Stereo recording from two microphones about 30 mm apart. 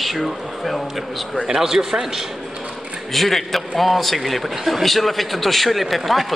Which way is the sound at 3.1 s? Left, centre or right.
Centre.